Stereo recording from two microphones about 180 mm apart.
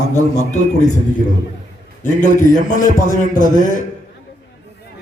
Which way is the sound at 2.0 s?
45° left (ahead or behind).